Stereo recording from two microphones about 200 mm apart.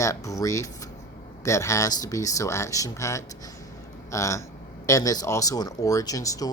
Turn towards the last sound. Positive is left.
turn(degrees=15)  # may be behind; listen again after turning